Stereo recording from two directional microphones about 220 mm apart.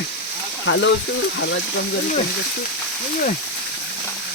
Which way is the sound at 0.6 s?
55° left (ahead or behind).